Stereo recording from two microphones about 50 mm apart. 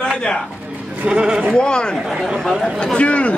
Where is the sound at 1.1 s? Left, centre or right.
Centre.